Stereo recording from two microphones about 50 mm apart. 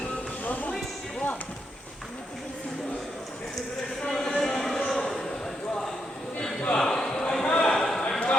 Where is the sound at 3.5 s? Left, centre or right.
Centre.